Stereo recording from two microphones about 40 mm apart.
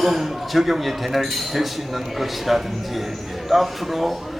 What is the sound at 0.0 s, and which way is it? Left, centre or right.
Speech, centre.